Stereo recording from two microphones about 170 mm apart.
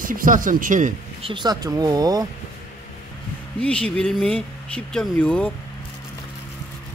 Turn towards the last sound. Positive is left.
turn(degrees=5)  # may be behind; listen again after turning